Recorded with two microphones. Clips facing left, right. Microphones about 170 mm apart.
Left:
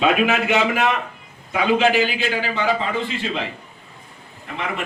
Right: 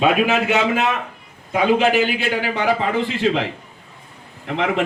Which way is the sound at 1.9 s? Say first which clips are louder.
Right 2 dB; 60° right (ahead or behind).